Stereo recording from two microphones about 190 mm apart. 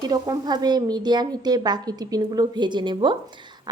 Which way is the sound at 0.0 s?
20° right (ahead or behind).